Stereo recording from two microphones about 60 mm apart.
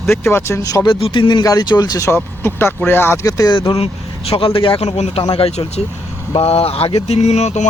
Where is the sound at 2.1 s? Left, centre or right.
Left.